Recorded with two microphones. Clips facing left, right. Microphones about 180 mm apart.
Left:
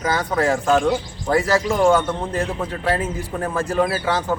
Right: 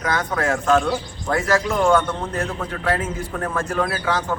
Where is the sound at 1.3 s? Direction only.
30° left (ahead or behind).